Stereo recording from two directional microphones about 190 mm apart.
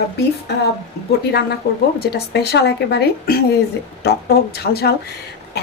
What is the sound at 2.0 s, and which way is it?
A woman's voice, 55° left (ahead or behind).